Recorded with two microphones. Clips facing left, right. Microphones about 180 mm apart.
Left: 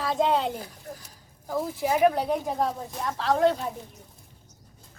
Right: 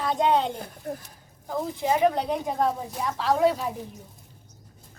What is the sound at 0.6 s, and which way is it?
Speech, 55° right (ahead or behind).